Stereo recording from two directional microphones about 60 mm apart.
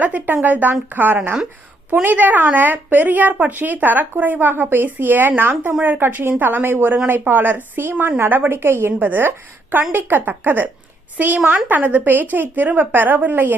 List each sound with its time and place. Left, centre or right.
0.0 s a woman's voice: right